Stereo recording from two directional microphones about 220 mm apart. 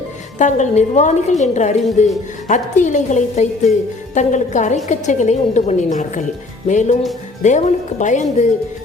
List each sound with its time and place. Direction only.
0.3 s a woman's voice: 35° left (ahead or behind)